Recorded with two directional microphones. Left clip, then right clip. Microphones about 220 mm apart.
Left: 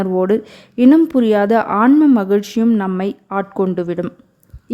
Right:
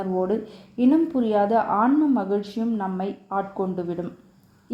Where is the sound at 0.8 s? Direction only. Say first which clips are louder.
Left 9 dB; 60° left (ahead or behind).